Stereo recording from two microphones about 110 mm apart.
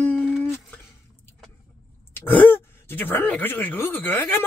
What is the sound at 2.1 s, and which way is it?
Speech, 15° left (ahead or behind).